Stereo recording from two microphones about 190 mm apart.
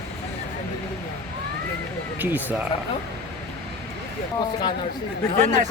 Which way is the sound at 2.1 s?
10° right (ahead or behind).